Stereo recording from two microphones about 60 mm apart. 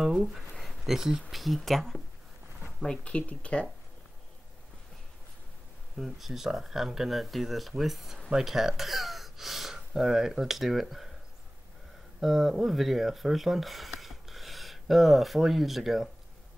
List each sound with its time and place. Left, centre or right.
0.0 s a sound: centre
1.3 s speech: centre
3.0 s speech: centre
5.9 s speech: centre
12.2 s speech: centre